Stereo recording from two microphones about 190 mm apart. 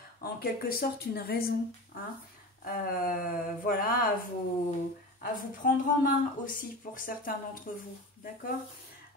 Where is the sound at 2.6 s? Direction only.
50° left (ahead or behind).